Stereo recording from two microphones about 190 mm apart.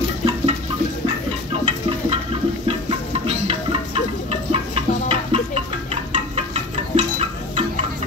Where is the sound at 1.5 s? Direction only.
30° right (ahead or behind).